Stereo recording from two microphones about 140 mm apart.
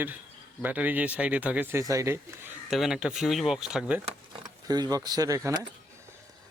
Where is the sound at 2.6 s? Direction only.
Centre (ahead or behind).